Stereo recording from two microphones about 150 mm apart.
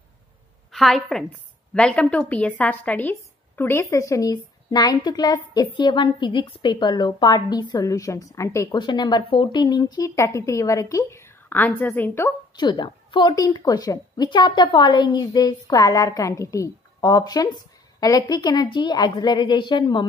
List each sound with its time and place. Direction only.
0.7 s a woman's voice: centre (ahead or behind)
12.5 s a woman's voice: 30° left (ahead or behind)